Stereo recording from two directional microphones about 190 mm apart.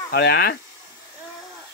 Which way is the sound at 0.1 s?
55° left (ahead or behind).